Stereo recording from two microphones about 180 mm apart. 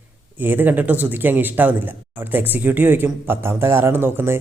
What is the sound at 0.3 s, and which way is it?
A man's voice, 10° right (ahead or behind).